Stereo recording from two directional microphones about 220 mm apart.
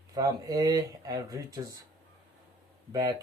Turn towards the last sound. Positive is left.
turn(degrees=-20)  # may be behind; listen again after turning